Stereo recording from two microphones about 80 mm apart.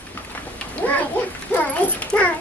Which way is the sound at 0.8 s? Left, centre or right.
Centre.